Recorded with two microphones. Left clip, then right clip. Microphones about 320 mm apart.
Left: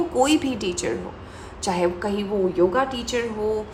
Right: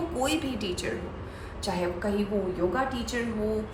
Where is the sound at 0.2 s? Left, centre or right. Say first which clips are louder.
Left 9 dB; left.